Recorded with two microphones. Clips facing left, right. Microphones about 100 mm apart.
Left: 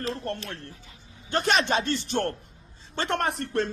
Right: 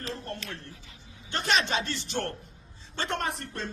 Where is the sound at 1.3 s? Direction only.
45° left (ahead or behind).